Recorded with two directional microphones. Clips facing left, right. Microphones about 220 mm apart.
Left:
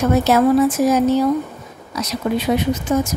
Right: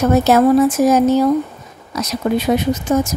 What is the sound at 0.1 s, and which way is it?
A woman's voice, 45° right (ahead or behind).